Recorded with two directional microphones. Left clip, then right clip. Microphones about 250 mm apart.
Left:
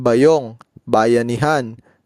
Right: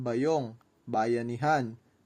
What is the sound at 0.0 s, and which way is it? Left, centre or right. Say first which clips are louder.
Speech: left 16 dB; left.